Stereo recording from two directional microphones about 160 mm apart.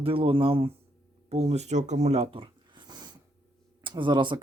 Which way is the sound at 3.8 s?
30° right (ahead or behind).